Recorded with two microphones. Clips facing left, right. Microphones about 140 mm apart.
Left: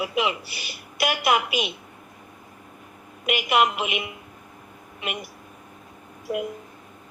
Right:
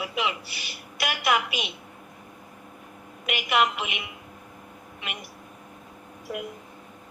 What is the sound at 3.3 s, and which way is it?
Speech, 20° left (ahead or behind).